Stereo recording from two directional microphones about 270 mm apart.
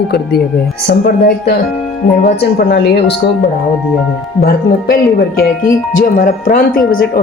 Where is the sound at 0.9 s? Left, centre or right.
Left.